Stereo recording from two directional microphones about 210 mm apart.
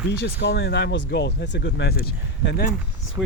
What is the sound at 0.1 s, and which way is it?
Speech, 55° left (ahead or behind).